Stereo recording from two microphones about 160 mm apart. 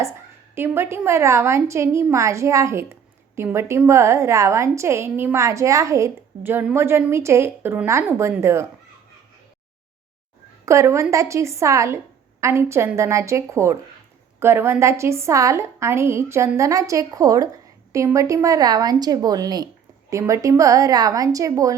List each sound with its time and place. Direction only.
0.5 s a woman's voice: 15° right (ahead or behind)
10.7 s a woman's voice: 20° right (ahead or behind)